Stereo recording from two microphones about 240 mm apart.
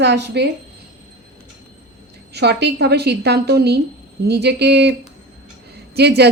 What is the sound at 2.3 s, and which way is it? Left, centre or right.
A woman's voice, right.